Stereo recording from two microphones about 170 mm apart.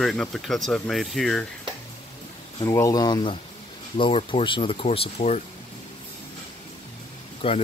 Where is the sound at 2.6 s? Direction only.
20° left (ahead or behind); by 5.4 s 40° left (ahead or behind).